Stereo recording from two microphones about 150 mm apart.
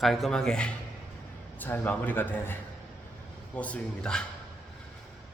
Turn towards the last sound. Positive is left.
turn(degrees=5)  # may be behind; listen again after turning